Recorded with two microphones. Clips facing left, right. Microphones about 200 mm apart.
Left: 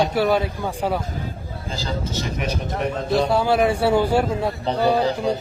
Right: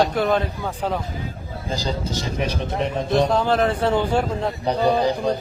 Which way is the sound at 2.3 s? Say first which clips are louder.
Right 3 dB; 25° right (ahead or behind).